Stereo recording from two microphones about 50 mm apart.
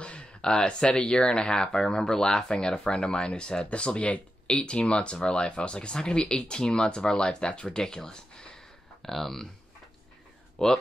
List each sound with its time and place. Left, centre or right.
0.0 s speech: left
9.0 s speech: centre
10.6 s speech: centre